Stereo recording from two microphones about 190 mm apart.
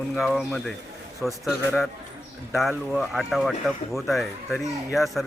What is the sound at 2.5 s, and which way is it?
Speech, centre (ahead or behind).